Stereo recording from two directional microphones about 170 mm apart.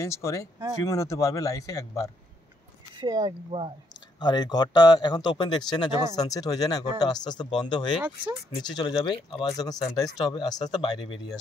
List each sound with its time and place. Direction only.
0.0 s speech: 20° left (ahead or behind)
3.0 s speech: 25° right (ahead or behind)
4.2 s speech: 25° left (ahead or behind)